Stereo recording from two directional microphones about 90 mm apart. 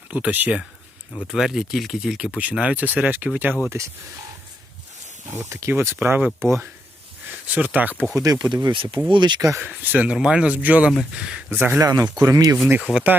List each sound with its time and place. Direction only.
0.1 s speech: 15° right (ahead or behind)
1.2 s speech: centre (ahead or behind)
2.4 s speech: 15° right (ahead or behind)
5.3 s speech: 30° right (ahead or behind)
8.1 s speech: 40° right (ahead or behind)
8.7 s speech: 65° right (ahead or behind)
9.6 s speech: 20° right (ahead or behind)
10.2 s speech: 10° right (ahead or behind)
11.5 s speech: 25° right (ahead or behind)
11.8 s speech: 40° right (ahead or behind)
12.8 s speech: 15° right (ahead or behind)